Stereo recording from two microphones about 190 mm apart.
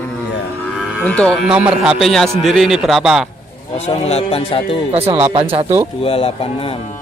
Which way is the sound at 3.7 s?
35° left (ahead or behind).